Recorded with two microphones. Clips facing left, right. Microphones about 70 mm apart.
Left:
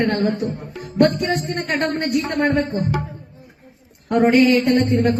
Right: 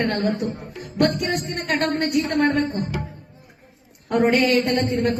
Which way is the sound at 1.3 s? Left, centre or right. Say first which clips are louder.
Left 2 dB; left.